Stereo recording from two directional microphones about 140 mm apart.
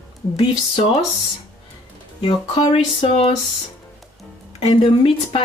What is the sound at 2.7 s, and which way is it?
Speech, 45° left (ahead or behind).